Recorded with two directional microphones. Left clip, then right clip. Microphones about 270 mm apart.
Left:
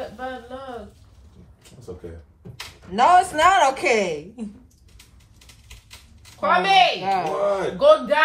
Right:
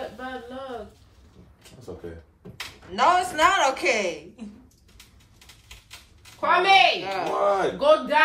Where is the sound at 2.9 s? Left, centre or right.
Centre.